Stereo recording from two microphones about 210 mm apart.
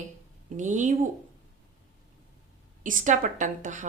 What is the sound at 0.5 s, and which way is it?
Speech, 35° right (ahead or behind).